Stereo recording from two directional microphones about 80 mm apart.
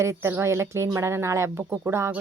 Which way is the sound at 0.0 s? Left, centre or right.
Right.